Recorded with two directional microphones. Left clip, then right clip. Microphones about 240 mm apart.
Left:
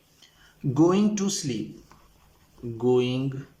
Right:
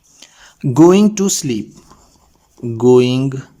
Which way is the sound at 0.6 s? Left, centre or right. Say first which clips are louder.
Right 12 dB; right.